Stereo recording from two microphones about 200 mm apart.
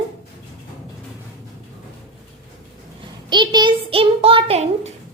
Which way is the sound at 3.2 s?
20° right (ahead or behind).